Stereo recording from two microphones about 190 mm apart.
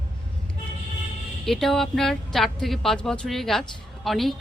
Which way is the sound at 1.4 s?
Centre (ahead or behind).